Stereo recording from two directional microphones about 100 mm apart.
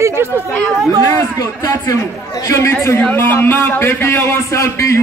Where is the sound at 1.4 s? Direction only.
35° left (ahead or behind).